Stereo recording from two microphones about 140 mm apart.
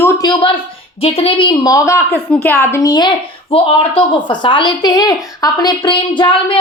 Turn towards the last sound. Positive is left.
turn(degrees=35)  # may be behind; listen again after turning